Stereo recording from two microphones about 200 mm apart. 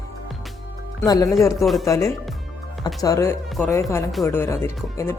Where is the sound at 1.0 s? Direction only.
20° left (ahead or behind).